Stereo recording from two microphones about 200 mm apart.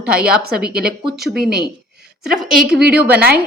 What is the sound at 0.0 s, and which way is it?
Speech, 5° right (ahead or behind).